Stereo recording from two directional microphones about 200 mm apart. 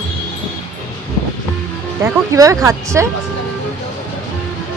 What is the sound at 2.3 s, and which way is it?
Speech, 15° right (ahead or behind).